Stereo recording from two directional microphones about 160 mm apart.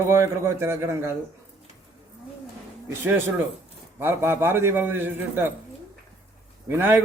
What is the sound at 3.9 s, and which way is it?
A man's voice, 15° right (ahead or behind).